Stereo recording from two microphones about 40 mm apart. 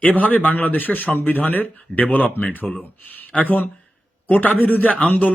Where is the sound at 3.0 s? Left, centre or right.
Left.